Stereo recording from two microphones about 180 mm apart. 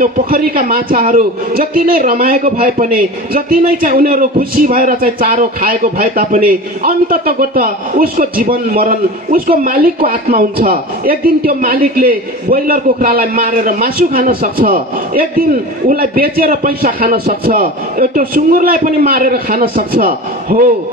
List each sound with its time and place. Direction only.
0.0 s a man's voice: 55° right (ahead or behind)